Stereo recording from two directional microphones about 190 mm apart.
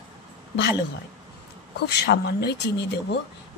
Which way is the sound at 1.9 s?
60° left (ahead or behind).